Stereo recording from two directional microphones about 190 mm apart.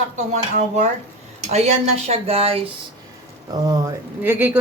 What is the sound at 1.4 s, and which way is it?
Speech, 35° right (ahead or behind).